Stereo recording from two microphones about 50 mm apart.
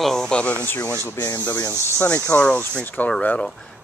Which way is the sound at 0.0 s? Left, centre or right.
Centre.